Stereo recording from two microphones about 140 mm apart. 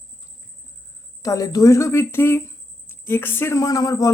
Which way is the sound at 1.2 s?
25° left (ahead or behind).